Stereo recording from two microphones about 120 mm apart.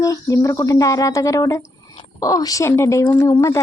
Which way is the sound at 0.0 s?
30° left (ahead or behind).